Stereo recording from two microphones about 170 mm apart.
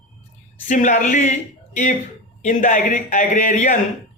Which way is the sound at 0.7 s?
45° left (ahead or behind).